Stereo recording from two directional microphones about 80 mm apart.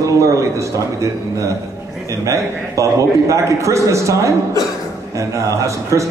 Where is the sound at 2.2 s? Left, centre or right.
Right.